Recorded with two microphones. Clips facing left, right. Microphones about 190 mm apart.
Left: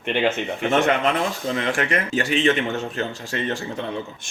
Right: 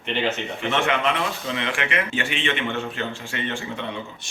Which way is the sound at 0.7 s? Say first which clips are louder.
Left 3 dB; 40° left (ahead or behind).